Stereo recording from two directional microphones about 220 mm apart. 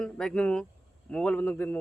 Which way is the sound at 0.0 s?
5° left (ahead or behind).